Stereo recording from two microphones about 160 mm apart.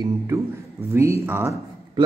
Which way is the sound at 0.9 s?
15° right (ahead or behind).